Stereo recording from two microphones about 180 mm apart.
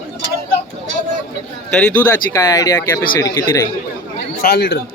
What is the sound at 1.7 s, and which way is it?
Speech, 10° left (ahead or behind).